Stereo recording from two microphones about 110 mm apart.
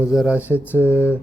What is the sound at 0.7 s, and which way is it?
Speech, 15° right (ahead or behind).